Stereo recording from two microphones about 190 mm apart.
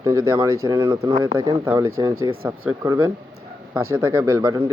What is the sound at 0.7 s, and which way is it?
Speech, 20° right (ahead or behind).